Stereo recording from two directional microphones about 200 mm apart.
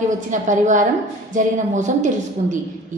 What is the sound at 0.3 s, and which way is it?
A woman's voice, 40° right (ahead or behind).